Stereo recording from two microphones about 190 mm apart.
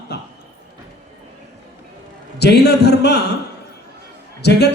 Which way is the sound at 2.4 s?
60° left (ahead or behind).